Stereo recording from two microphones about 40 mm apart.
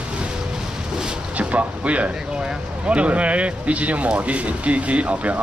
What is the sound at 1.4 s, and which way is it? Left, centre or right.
Speech, right.